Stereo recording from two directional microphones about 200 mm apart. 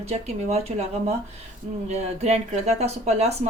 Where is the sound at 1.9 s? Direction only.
35° right (ahead or behind).